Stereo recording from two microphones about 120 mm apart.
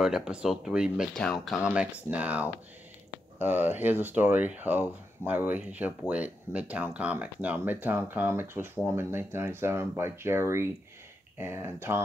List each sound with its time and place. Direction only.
0.0 s speech: 5° right (ahead or behind)